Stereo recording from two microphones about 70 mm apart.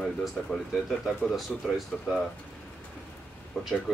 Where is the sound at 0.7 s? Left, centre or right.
Centre.